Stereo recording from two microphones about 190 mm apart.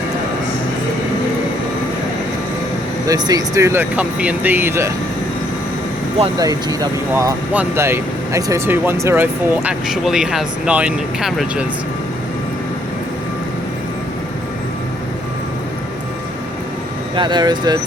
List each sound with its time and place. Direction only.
3.1 s speech: 20° right (ahead or behind)
6.4 s speech: 20° right (ahead or behind); by 11.6 s centre (ahead or behind)
17.2 s speech: 25° right (ahead or behind)